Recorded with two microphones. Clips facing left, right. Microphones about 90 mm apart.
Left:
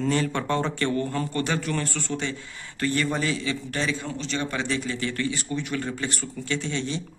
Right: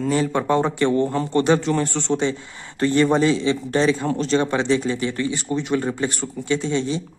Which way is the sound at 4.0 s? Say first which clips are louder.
Right 10 dB; 45° right (ahead or behind).